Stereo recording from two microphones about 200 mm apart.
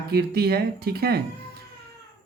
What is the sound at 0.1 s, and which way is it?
Speech, 50° right (ahead or behind).